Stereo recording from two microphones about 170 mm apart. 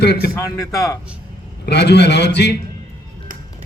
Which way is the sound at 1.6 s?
75° left (ahead or behind).